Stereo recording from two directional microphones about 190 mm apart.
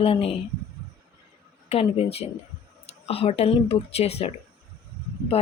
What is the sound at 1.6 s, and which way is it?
A woman's voice, 30° left (ahead or behind).